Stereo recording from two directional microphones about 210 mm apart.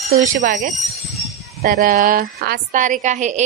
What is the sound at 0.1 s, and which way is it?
Speech, 40° right (ahead or behind).